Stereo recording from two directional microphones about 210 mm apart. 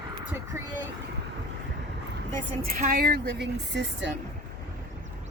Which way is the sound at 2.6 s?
45° right (ahead or behind).